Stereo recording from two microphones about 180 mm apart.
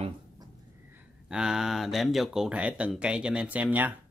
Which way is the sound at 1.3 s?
5° right (ahead or behind).